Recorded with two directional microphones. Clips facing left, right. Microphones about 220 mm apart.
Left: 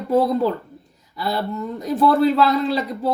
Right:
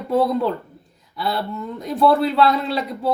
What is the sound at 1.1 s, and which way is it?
Speech, centre (ahead or behind).